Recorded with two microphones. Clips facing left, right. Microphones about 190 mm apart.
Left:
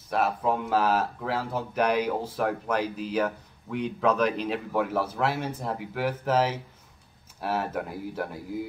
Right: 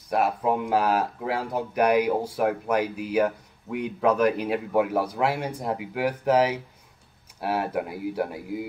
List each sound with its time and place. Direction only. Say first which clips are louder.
0.1 s speech: right 2 dB; 15° right (ahead or behind)